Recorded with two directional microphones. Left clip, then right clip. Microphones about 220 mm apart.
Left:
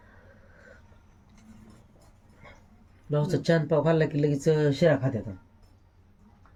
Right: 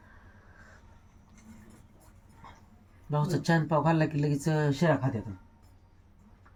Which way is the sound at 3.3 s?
15° right (ahead or behind).